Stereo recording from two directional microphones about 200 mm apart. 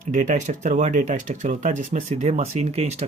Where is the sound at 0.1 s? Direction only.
40° right (ahead or behind).